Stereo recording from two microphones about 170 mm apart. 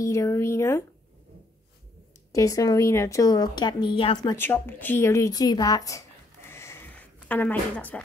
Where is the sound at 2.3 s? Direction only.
20° left (ahead or behind).